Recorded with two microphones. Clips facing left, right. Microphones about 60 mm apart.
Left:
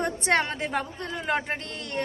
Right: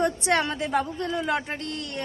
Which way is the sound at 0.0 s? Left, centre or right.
Left.